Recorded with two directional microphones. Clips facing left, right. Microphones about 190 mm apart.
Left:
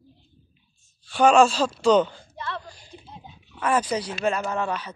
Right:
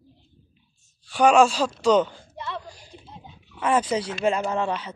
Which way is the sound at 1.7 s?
10° right (ahead or behind).